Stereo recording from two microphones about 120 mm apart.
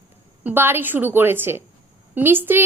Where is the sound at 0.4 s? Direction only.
20° right (ahead or behind).